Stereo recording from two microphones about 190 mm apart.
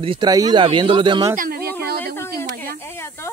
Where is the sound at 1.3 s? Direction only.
50° right (ahead or behind).